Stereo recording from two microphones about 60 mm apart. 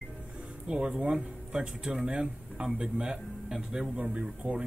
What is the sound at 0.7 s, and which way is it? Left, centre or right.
Speech, centre.